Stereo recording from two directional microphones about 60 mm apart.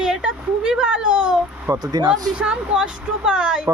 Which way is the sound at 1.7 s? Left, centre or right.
Right.